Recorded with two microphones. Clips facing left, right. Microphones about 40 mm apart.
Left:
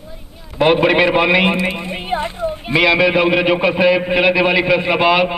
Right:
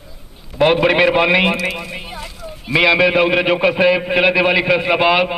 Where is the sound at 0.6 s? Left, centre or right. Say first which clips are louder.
Even; centre.